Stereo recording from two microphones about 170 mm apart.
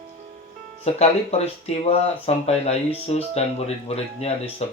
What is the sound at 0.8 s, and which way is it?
Speech, 40° left (ahead or behind).